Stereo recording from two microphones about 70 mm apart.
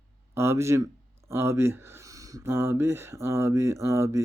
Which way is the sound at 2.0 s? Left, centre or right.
Right.